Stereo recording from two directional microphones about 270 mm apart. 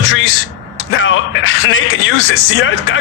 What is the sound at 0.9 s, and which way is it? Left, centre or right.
A man's voice, left.